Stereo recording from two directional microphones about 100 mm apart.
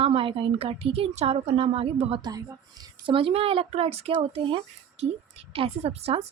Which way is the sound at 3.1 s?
65° right (ahead or behind).